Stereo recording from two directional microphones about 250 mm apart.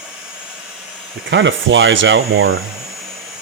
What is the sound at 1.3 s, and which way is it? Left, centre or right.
Speech, right.